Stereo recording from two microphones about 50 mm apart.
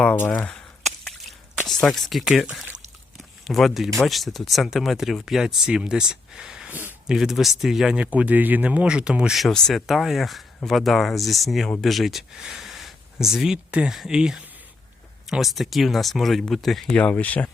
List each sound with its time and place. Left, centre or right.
1.6 s speech: centre
3.5 s speech: centre
6.7 s speech: right
7.1 s speech: centre
8.0 s speech: right
9.5 s speech: centre
9.8 s speech: centre
13.7 s speech: right
13.9 s speech: centre
14.2 s speech: centre
15.3 s speech: centre
17.0 s speech: left